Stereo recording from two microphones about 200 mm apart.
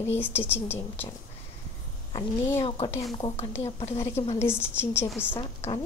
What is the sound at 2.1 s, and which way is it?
A woman's voice, 20° left (ahead or behind).